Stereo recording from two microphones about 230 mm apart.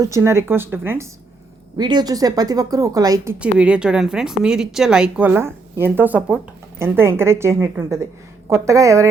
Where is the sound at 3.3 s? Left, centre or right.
Centre.